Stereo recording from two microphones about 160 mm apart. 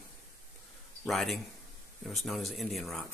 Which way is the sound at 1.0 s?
Centre (ahead or behind).